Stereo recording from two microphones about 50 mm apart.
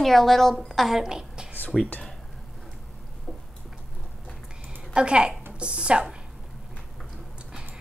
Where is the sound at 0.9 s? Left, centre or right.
Centre.